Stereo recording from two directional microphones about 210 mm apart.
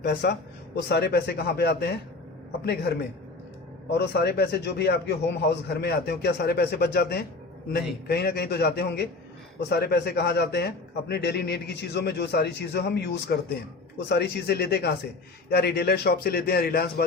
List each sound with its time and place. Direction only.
0.0 s a man's voice: 50° left (ahead or behind)